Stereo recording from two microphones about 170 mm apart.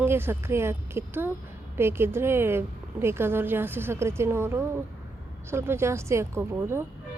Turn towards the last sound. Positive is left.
turn(degrees=-15)  # may be behind; listen again after turning